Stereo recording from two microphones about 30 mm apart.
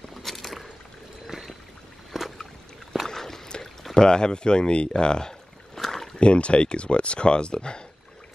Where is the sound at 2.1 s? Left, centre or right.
Centre.